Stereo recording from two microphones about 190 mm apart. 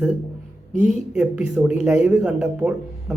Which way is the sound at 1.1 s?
5° right (ahead or behind).